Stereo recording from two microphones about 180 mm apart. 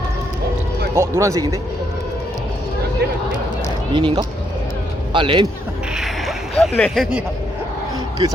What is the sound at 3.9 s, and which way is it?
Speech, 25° right (ahead or behind).